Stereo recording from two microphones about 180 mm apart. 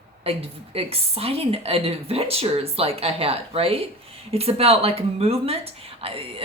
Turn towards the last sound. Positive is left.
turn(degrees=-30)  # may be behind; listen again after turning